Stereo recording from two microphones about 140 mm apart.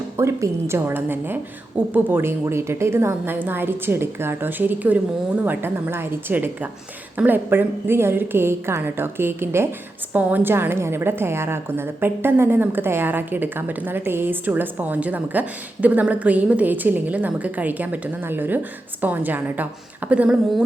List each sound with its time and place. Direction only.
0.2 s a woman's voice: 20° right (ahead or behind)